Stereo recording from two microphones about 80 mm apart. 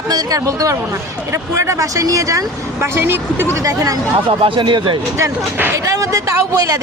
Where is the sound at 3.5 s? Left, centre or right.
Right.